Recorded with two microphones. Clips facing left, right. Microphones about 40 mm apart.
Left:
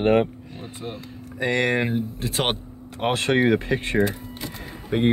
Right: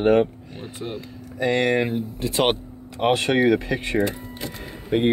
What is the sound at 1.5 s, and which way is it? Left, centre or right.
Speech, centre.